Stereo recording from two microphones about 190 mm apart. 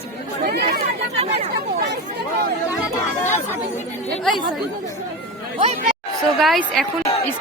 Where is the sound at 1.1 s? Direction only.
35° right (ahead or behind).